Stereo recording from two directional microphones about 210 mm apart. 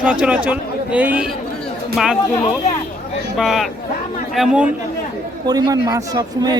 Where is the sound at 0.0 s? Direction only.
5° right (ahead or behind).